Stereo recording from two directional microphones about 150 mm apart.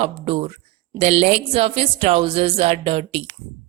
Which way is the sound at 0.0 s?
45° right (ahead or behind).